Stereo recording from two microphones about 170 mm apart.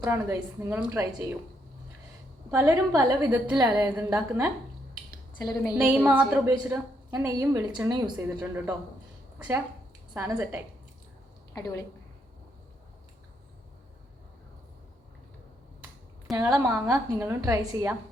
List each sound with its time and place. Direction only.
0.0 s a woman's voice: 10° right (ahead or behind)
2.5 s a woman's voice: 15° right (ahead or behind)
3.9 s a woman's voice: 10° right (ahead or behind)
5.4 s a woman's voice: 25° left (ahead or behind)
5.7 s a woman's voice: 10° right (ahead or behind)
8.4 s a woman's voice: 15° right (ahead or behind)
10.2 s a woman's voice: 10° right (ahead or behind)
11.5 s a woman's voice: 20° left (ahead or behind)
16.3 s a woman's voice: 20° right (ahead or behind)